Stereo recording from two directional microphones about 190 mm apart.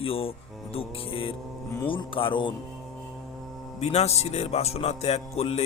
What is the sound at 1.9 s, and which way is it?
Speech, 25° left (ahead or behind).